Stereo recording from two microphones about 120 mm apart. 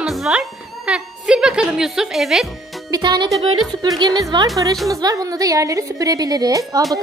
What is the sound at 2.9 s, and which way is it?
A woman's voice, 35° right (ahead or behind).